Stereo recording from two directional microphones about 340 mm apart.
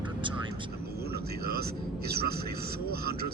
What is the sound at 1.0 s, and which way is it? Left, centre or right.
Speech, right.